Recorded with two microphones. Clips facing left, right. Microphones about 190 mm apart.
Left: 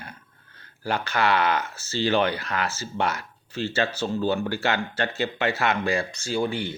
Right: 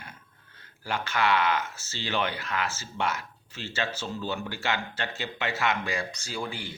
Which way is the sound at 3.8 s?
60° left (ahead or behind).